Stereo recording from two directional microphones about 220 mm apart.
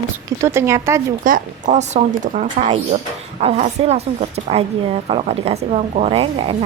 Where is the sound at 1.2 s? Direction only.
35° right (ahead or behind).